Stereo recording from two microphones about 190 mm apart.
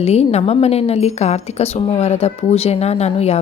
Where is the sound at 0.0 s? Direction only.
35° left (ahead or behind).